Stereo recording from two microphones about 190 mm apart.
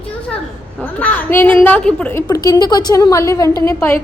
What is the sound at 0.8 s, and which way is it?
A woman's voice, 10° left (ahead or behind).